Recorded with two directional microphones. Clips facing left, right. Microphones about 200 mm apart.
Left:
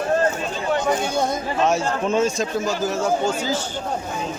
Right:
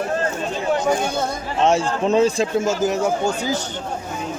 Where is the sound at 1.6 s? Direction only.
30° right (ahead or behind).